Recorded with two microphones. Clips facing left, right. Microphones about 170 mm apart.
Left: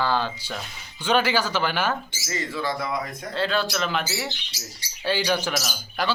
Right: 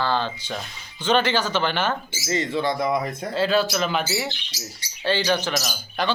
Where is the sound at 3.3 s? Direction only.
5° right (ahead or behind).